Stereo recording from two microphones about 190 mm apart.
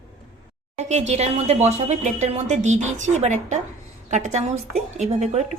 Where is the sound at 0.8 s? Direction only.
35° right (ahead or behind).